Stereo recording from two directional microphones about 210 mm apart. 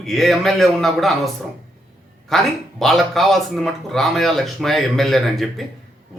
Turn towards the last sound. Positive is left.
turn(degrees=0)  # may be behind; listen again after turning